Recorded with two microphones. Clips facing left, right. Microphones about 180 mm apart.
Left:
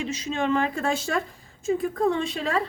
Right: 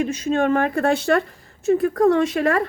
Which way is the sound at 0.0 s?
55° right (ahead or behind).